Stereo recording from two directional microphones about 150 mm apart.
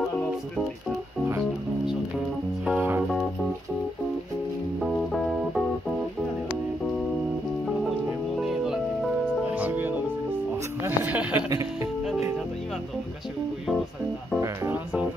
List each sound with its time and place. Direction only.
2.6 s music: 10° right (ahead or behind)
8.4 s music: 5° right (ahead or behind)
9.6 s music: 15° right (ahead or behind)
10.8 s a sound: 10° right (ahead or behind)
11.4 s music: 20° right (ahead or behind)
14.4 s music: 20° right (ahead or behind)